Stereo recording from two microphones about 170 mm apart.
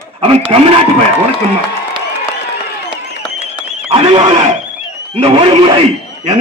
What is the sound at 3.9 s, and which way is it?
A man's voice, 35° right (ahead or behind).